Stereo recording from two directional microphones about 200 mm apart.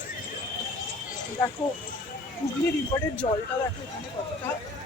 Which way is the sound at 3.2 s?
35° left (ahead or behind).